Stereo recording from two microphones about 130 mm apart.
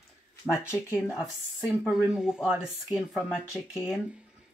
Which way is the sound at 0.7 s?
20° left (ahead or behind).